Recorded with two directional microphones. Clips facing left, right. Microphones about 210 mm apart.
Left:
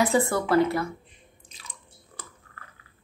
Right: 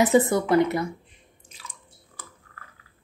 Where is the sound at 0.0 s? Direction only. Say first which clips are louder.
Right 4 dB; 20° right (ahead or behind).